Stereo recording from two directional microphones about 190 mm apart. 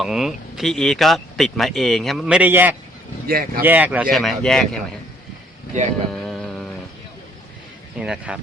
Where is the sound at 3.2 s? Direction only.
50° right (ahead or behind).